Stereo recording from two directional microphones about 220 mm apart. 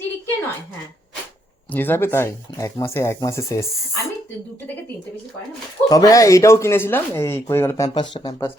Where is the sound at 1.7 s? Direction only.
10° left (ahead or behind).